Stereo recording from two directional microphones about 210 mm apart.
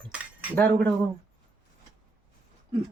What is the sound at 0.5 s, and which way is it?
Speech, 10° left (ahead or behind).